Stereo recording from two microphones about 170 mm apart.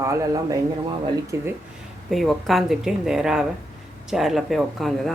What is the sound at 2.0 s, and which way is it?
Speech, centre (ahead or behind).